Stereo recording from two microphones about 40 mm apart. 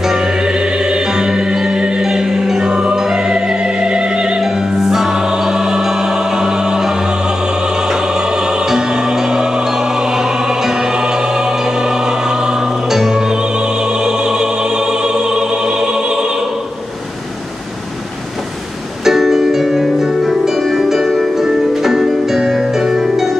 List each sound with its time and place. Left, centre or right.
0.0 s music: centre
4.4 s choir: centre
19.0 s music: centre